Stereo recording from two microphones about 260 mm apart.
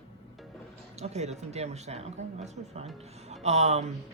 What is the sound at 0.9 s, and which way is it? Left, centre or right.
Speech, right.